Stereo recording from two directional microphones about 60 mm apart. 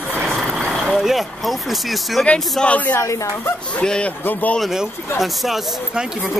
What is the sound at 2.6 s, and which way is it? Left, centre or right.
Speech, left.